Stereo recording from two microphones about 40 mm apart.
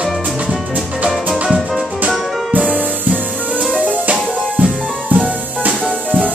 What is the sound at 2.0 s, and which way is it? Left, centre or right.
Music, right.